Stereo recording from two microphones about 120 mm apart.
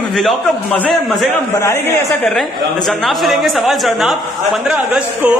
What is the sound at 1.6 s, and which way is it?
Speech, 20° left (ahead or behind).